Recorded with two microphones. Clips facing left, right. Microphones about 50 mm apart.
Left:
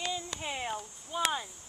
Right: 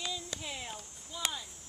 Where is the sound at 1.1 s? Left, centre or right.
Left.